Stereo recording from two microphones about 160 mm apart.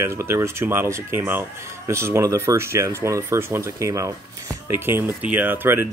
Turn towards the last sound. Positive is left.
turn(degrees=-15)  # may be behind; listen again after turning